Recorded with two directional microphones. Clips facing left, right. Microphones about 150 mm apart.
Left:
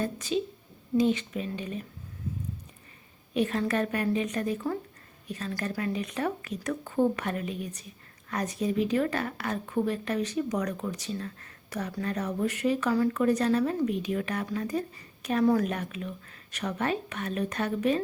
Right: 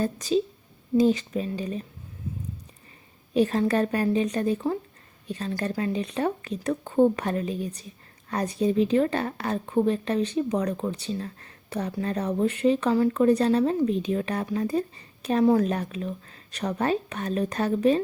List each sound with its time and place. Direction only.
0.0 s a woman's voice: 35° right (ahead or behind)
3.3 s a woman's voice: 30° right (ahead or behind)